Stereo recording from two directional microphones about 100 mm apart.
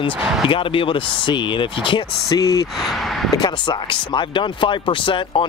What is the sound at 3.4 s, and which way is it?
Speech, 50° left (ahead or behind).